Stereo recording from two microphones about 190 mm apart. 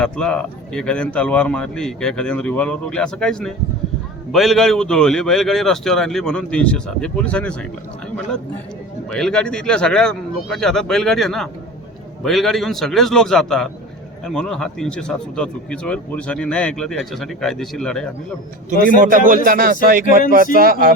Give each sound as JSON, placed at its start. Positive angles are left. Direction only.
{"t": 0.0, "sound": "speech", "side_deg": 5}
{"t": 9.0, "sound": "speech", "side_deg": 5}
{"t": 18.9, "sound": "speech", "side_deg": -45}